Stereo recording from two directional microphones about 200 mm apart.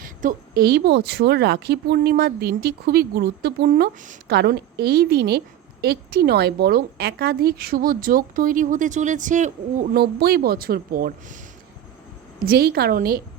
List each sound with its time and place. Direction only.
0.0 s a woman's voice: 45° right (ahead or behind)
4.3 s a woman's voice: 55° right (ahead or behind)
12.5 s a woman's voice: 50° right (ahead or behind)